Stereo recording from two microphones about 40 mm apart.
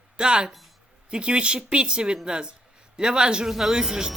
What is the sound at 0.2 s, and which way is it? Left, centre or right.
Speech, right.